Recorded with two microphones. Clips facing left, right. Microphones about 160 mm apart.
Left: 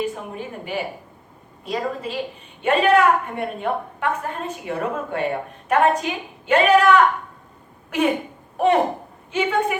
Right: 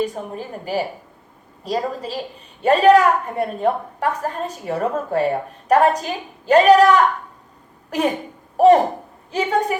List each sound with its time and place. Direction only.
0.0 s a woman's voice: 35° right (ahead or behind)